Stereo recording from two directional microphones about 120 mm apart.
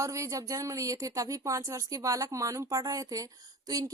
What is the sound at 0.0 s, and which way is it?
Speech, 25° right (ahead or behind).